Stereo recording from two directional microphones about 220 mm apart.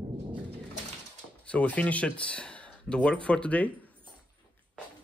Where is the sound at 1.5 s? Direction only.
5° left (ahead or behind).